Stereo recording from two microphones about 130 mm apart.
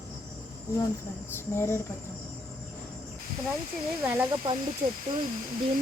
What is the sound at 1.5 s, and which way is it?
Speech, 20° left (ahead or behind).